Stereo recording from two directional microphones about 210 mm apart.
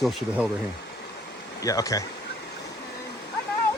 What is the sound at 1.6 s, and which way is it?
Speech, 15° left (ahead or behind).